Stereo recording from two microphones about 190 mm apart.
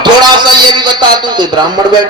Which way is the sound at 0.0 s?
25° right (ahead or behind).